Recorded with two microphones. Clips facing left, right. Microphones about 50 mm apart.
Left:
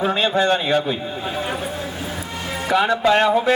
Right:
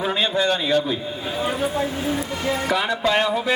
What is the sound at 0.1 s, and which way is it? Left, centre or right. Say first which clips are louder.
Speech: left 1 dB; left.